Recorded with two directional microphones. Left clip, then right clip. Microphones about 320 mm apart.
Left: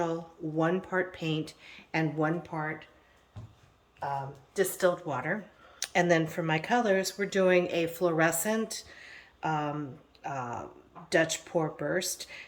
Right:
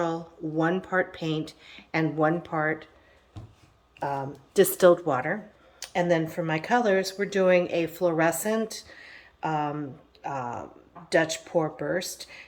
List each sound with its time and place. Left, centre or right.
0.0 s speech: centre
4.0 s speech: right
5.0 s speech: centre